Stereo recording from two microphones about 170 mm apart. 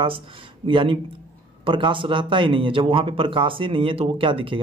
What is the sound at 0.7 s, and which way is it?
Speech, 30° right (ahead or behind).